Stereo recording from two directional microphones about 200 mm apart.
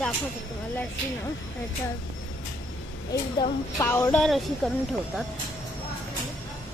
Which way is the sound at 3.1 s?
20° left (ahead or behind).